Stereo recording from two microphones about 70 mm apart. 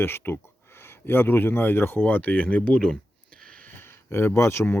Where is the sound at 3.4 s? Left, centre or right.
Centre; by 4.8 s left.